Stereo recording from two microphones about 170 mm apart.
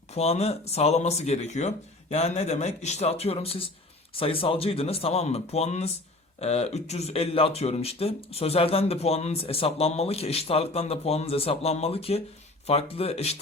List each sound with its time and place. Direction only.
0.1 s speech: 40° left (ahead or behind)